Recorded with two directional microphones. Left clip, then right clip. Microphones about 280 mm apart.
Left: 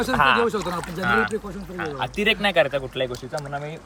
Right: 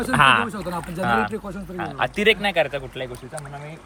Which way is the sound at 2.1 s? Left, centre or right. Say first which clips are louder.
Even; centre.